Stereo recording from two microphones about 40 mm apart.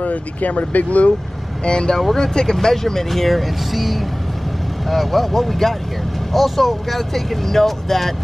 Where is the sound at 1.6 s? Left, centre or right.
Left.